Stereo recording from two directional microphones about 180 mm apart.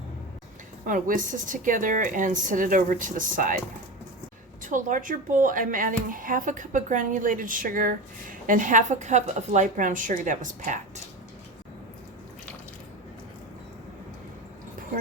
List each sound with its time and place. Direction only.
0.9 s speech: 45° right (ahead or behind)
4.6 s speech: 45° right (ahead or behind)